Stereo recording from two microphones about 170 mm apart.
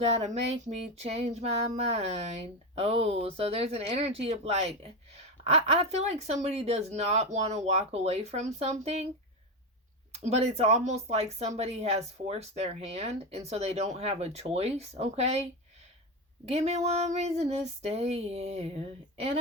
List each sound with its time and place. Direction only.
0.0 s speech: 40° right (ahead or behind)
10.2 s speech: 40° right (ahead or behind)
16.5 s speech: 40° right (ahead or behind)